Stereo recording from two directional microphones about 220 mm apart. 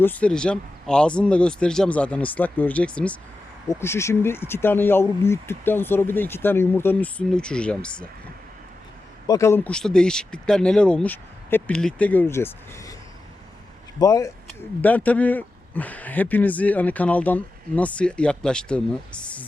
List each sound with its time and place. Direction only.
0.0 s speech: 5° left (ahead or behind)
9.2 s speech: 15° left (ahead or behind)
14.0 s speech: 15° left (ahead or behind)